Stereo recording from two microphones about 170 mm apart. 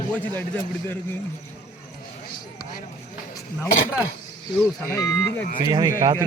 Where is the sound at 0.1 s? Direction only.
10° left (ahead or behind).